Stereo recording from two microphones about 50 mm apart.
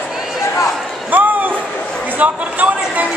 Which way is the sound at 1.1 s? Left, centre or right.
Right.